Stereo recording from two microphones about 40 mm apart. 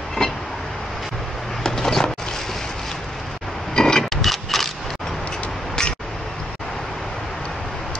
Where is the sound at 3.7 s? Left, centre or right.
Centre.